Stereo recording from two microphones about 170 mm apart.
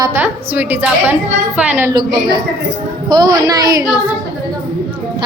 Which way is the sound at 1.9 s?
25° right (ahead or behind).